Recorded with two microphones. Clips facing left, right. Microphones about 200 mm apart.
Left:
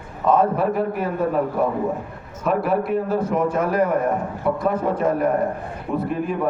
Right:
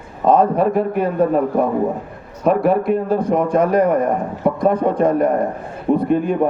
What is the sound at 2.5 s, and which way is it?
A man's voice, 5° left (ahead or behind).